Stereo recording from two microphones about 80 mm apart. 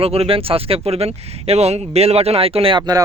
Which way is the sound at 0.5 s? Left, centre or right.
Right.